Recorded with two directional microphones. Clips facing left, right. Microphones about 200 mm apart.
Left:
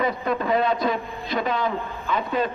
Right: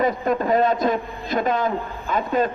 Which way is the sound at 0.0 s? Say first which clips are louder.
Right 3 dB; 45° right (ahead or behind).